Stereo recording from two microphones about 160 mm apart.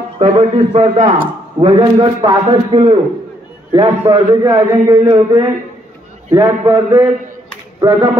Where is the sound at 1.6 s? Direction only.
30° right (ahead or behind).